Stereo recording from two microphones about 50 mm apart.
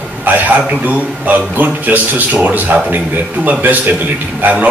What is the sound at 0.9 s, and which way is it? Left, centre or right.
Speech, right.